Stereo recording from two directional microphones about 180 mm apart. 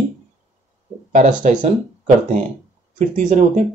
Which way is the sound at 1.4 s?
45° right (ahead or behind).